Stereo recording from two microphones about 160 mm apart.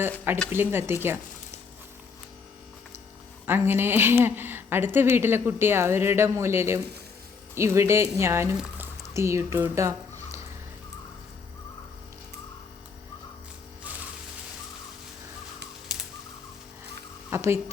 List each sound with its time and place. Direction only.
0.5 s a woman's voice: 15° right (ahead or behind)
3.4 s a woman's voice: 15° right (ahead or behind)
8.5 s squish: 5° right (ahead or behind)
9.1 s a woman's voice: 20° right (ahead or behind)
15.9 s bird: 5° right (ahead or behind)
17.2 s a woman's voice: 15° right (ahead or behind)